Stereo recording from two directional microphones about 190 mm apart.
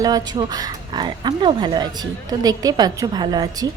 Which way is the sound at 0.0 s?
20° right (ahead or behind).